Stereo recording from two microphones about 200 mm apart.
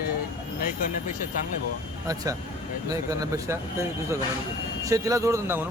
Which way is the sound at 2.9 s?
15° right (ahead or behind).